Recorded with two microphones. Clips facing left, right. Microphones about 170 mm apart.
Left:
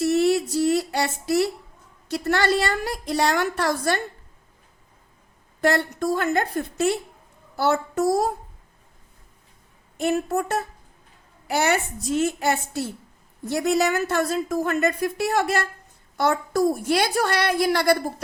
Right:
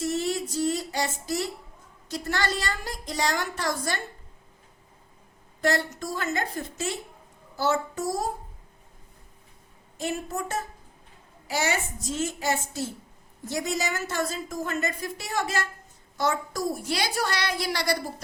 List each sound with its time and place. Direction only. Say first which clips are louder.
0.0 s a sound: left 8 dB; 65° left (ahead or behind)
2.0 s a woman's voice: left 7 dB; 65° left (ahead or behind)
5.5 s a woman's voice: left 4 dB; 60° left (ahead or behind)
10.0 s a woman's voice: left 8 dB; 60° left (ahead or behind)